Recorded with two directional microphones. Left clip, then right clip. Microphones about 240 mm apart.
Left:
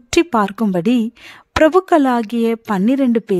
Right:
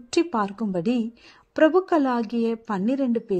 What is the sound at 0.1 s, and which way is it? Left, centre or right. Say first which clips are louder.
Speech: left 8 dB; left.